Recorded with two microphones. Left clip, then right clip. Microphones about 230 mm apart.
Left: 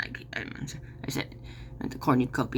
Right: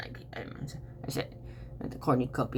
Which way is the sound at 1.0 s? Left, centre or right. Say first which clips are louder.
Left 2 dB; centre.